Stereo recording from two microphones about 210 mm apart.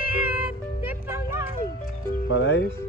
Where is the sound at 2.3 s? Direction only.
60° left (ahead or behind).